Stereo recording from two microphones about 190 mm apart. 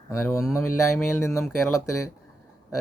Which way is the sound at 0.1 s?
15° left (ahead or behind).